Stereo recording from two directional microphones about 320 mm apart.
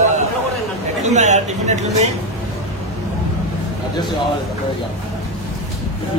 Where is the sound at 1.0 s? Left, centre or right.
Right.